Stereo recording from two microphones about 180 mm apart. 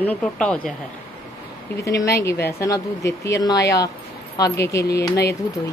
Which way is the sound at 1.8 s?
15° left (ahead or behind).